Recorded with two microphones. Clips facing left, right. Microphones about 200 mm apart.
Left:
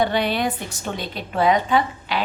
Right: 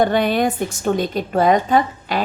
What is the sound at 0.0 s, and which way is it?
A woman's voice, 50° right (ahead or behind).